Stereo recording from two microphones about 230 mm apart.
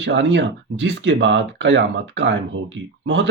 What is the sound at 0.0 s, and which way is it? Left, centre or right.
Speech, right.